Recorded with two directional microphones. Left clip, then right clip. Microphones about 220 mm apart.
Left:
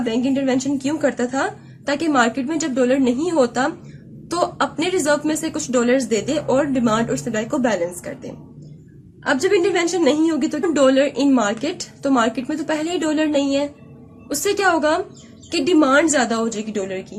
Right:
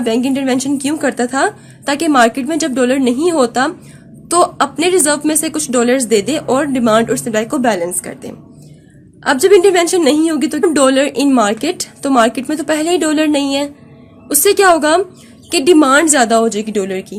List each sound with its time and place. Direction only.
0.0 s a woman's voice: 45° right (ahead or behind)